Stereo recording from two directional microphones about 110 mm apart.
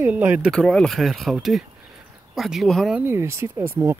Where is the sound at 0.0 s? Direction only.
15° right (ahead or behind).